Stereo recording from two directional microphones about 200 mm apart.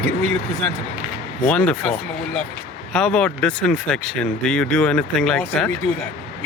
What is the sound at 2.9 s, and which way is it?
Speech, 5° left (ahead or behind).